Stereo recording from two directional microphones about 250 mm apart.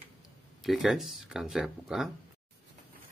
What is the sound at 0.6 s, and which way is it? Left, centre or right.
Speech, centre.